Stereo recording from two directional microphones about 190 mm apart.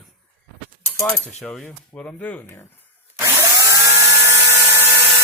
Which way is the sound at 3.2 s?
15° right (ahead or behind).